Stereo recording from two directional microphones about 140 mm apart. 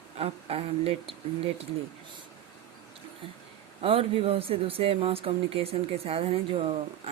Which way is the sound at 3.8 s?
45° right (ahead or behind).